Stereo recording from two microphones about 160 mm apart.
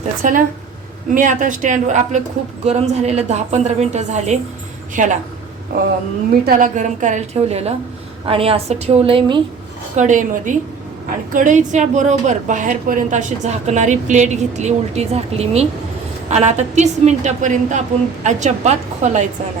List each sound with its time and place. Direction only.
0.2 s a woman's voice: 55° right (ahead or behind); by 9.4 s 30° right (ahead or behind)
9.9 s a woman's voice: 50° right (ahead or behind)